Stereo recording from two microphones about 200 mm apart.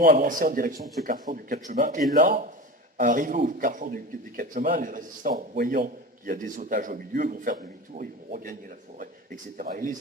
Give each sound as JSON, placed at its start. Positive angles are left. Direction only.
{"t": 0.2, "sound": "a man's voice", "side_deg": -45}